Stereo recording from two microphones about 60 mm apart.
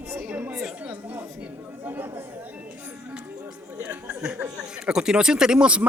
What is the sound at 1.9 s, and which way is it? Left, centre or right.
Chatter, right.